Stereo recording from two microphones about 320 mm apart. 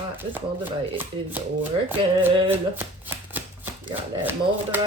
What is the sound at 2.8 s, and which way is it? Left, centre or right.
Speech, centre.